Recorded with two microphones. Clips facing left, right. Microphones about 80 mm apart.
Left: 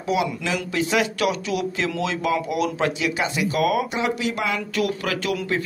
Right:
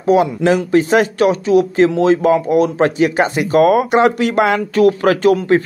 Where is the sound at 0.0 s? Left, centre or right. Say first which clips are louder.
Right 11 dB; right.